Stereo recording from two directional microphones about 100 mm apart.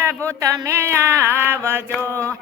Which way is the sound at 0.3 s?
30° right (ahead or behind).